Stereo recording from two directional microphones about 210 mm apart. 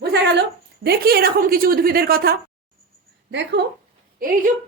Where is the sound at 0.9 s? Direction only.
45° right (ahead or behind).